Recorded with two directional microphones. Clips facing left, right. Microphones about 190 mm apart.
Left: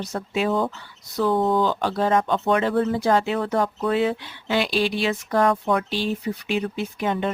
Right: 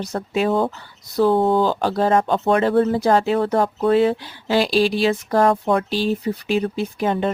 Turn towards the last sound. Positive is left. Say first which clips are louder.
# right 4 dB
turn(degrees=-35)  # may be behind; listen again after turning